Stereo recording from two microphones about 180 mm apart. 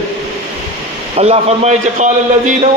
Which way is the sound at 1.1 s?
35° right (ahead or behind).